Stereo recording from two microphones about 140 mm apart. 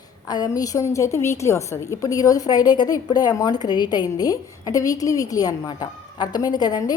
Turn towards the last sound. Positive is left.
turn(degrees=30)  # may be behind; listen again after turning